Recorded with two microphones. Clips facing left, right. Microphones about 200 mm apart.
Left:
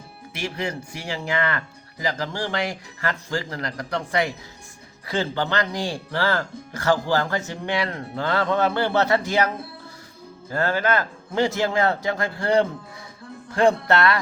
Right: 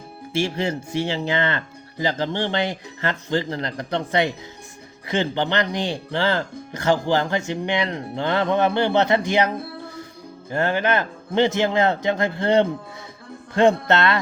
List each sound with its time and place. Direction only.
0.3 s speech: 25° right (ahead or behind)
10.5 s speech: 20° right (ahead or behind)